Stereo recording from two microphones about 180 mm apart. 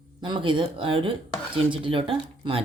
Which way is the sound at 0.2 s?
25° right (ahead or behind).